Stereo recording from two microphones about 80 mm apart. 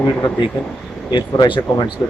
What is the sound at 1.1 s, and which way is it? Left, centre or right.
Speech, left.